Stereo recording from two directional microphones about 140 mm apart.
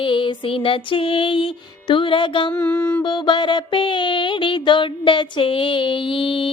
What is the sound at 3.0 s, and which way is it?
Music, 35° left (ahead or behind).